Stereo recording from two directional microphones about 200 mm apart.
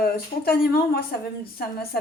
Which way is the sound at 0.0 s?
50° left (ahead or behind).